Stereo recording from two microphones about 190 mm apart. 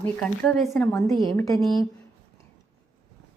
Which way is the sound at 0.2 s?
Centre (ahead or behind).